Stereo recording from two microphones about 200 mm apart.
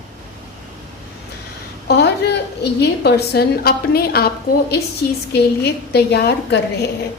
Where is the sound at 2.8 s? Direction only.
55° left (ahead or behind).